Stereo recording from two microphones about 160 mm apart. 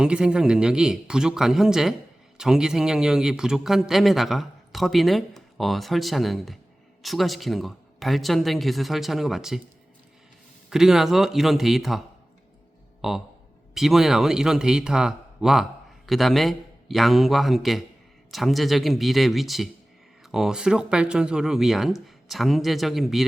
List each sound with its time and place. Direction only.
0.0 s speech: 5° right (ahead or behind)
10.7 s speech: 5° right (ahead or behind)